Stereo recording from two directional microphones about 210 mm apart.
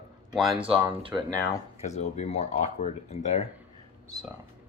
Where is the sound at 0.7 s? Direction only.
25° right (ahead or behind).